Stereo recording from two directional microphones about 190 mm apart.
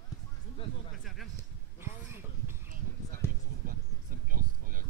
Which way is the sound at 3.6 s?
50° right (ahead or behind).